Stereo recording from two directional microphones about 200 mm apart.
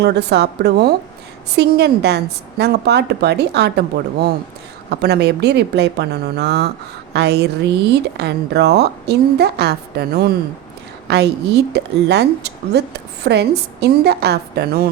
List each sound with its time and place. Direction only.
0.0 s a woman's voice: 55° right (ahead or behind)